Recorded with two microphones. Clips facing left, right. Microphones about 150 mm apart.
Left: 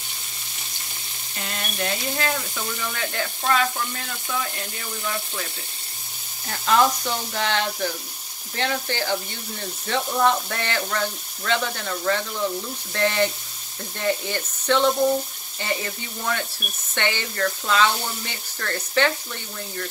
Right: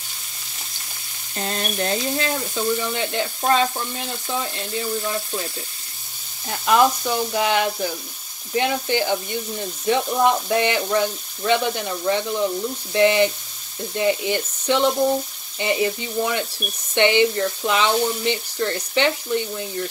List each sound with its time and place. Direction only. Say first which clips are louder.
1.3 s speech: right 7 dB; 35° right (ahead or behind)
6.5 s speech: right 2 dB; 15° right (ahead or behind)